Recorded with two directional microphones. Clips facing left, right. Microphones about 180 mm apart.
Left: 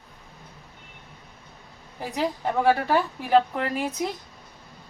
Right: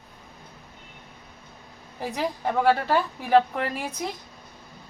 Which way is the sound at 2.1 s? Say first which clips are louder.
Left 1 dB; 5° left (ahead or behind).